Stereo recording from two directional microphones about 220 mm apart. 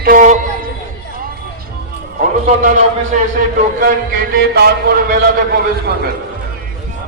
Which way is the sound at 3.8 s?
40° right (ahead or behind).